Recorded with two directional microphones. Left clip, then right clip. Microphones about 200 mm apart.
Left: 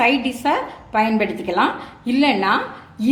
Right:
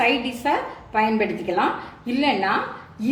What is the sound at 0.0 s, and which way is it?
A woman's voice, 40° left (ahead or behind).